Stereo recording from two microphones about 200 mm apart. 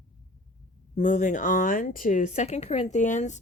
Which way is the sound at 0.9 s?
35° left (ahead or behind).